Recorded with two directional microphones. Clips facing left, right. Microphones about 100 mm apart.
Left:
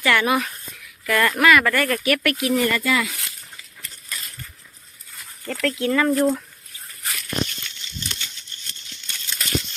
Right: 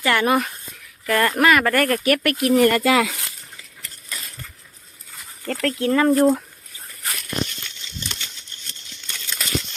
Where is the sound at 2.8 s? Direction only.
90° right.